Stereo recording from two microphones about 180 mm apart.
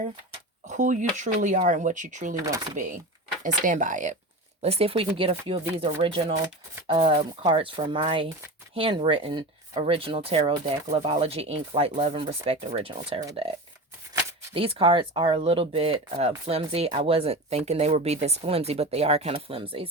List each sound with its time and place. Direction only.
0.7 s speech: 45° right (ahead or behind)
2.4 s speech: 20° right (ahead or behind)
2.7 s speech: 45° right (ahead or behind)
4.6 s speech: 35° right (ahead or behind)
14.5 s speech: 30° right (ahead or behind)